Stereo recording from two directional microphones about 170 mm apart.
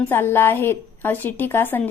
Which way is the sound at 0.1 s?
15° left (ahead or behind).